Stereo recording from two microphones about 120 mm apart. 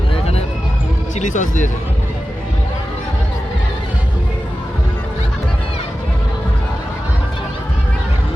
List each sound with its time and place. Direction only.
1.2 s speech: 90° left